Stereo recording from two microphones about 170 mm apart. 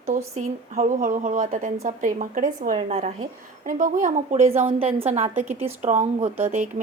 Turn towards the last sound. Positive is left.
turn(degrees=-50)  # may be behind; listen again after turning